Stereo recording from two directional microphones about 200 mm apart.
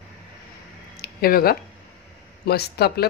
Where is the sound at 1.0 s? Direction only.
50° left (ahead or behind).